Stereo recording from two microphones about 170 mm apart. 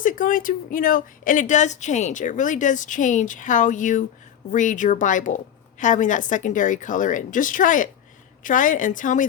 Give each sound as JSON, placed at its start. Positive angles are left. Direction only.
{"t": 0.0, "sound": "a woman's voice", "side_deg": 50}